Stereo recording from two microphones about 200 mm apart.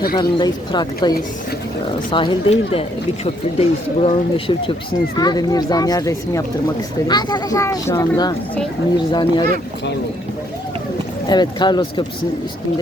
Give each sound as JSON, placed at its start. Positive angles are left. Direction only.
{"t": 0.2, "sound": "speech", "side_deg": 20}
{"t": 2.0, "sound": "speech", "side_deg": 25}
{"t": 11.3, "sound": "speech", "side_deg": 20}